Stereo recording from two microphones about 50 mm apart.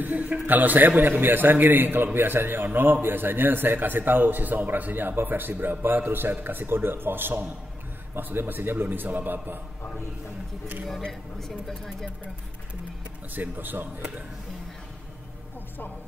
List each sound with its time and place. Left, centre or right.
0.0 s a man's voice: right
11.0 s speech: centre
13.3 s a man's voice: right